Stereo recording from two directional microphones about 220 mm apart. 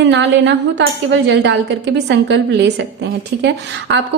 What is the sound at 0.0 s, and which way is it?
A woman's voice, 55° right (ahead or behind).